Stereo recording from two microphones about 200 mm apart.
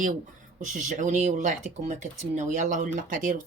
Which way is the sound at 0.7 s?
40° right (ahead or behind).